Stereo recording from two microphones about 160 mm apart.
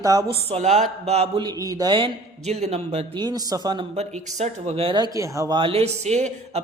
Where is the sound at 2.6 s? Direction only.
40° right (ahead or behind).